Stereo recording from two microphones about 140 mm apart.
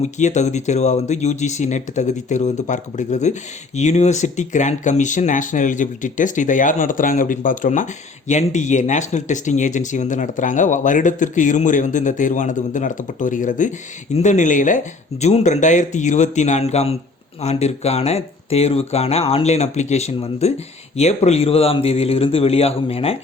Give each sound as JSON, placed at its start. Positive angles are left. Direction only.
{"t": 0.0, "sound": "speech", "side_deg": 55}
{"t": 8.3, "sound": "speech", "side_deg": 60}
{"t": 15.2, "sound": "speech", "side_deg": 50}